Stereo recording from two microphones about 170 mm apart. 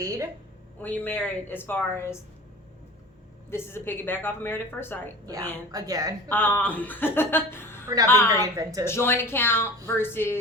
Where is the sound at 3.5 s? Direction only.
15° left (ahead or behind).